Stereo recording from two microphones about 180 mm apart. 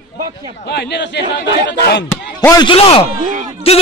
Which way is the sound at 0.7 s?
70° left (ahead or behind).